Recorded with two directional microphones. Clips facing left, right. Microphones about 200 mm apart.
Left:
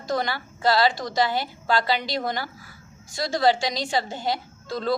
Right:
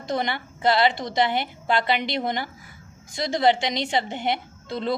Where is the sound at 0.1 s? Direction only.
20° right (ahead or behind).